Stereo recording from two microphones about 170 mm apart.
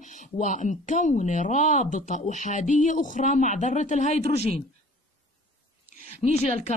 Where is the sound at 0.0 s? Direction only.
45° left (ahead or behind).